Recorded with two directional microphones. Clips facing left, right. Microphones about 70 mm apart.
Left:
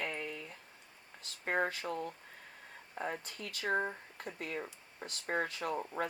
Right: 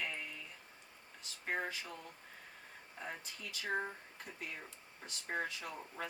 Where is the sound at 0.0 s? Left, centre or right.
Left.